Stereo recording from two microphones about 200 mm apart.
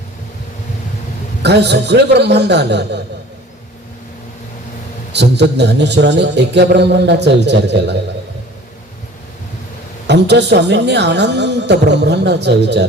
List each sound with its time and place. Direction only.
1.4 s a man's voice: 60° right (ahead or behind)
5.1 s a man's voice: 60° right (ahead or behind)
10.1 s a man's voice: 60° right (ahead or behind)